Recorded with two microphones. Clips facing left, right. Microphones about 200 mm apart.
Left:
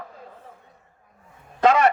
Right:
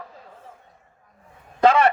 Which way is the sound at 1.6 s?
35° right (ahead or behind).